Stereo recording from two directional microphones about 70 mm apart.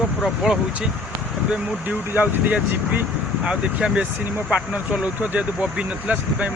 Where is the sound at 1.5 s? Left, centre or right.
Right.